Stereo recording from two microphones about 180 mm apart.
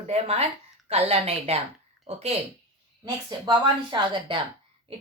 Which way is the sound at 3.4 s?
25° right (ahead or behind).